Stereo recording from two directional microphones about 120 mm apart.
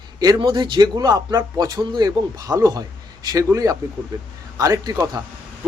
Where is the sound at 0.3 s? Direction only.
40° right (ahead or behind).